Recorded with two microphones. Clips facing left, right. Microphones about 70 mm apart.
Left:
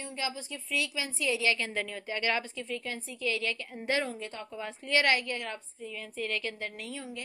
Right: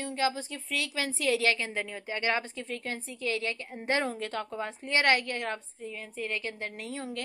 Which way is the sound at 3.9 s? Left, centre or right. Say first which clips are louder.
Right 2 dB; right.